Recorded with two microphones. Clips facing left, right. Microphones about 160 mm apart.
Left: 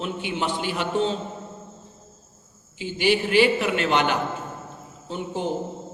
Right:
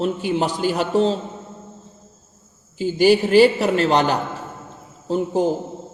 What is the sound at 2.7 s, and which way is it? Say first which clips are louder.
A man's voice: right 7 dB; 40° right (ahead or behind).